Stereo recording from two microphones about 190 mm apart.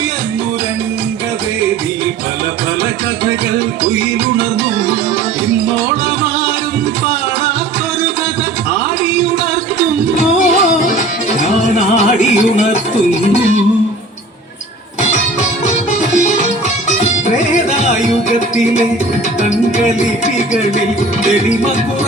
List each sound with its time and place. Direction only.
10.3 s music: 40° left (ahead or behind)
15.4 s music: 40° left (ahead or behind)
18.3 s music: 40° left (ahead or behind)